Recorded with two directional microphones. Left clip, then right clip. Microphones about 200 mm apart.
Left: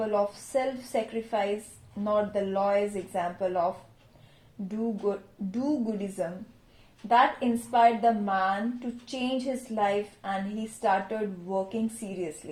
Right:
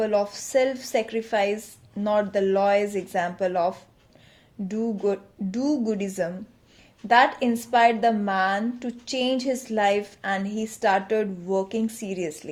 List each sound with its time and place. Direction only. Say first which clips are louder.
0.1 s a woman's voice: right 4 dB; 45° right (ahead or behind)
4.7 s a woman's voice: right 5 dB; 45° right (ahead or behind)